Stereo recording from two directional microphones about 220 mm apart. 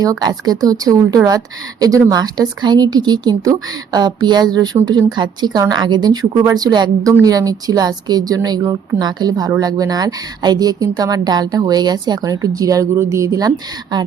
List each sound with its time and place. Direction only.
0.0 s a woman's voice: 15° right (ahead or behind)